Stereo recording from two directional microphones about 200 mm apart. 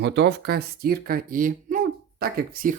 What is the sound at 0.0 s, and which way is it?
Speech, 55° right (ahead or behind).